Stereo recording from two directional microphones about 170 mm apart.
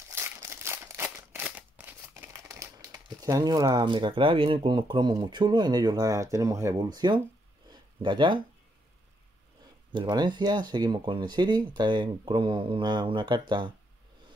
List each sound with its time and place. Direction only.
0.1 s scissors: 15° right (ahead or behind)
8.0 s speech: 25° right (ahead or behind)
9.9 s speech: 25° right (ahead or behind)